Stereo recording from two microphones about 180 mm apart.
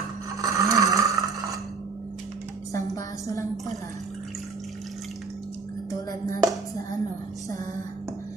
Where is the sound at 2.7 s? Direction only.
20° left (ahead or behind).